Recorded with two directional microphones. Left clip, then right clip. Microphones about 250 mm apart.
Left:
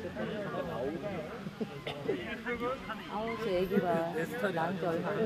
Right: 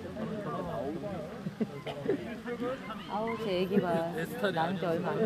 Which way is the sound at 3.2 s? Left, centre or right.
Right.